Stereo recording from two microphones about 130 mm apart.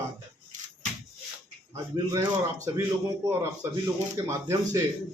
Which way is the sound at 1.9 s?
30° right (ahead or behind).